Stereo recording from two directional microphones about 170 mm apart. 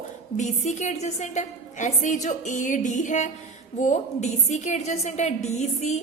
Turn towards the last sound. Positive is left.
turn(degrees=40)  # may be behind; listen again after turning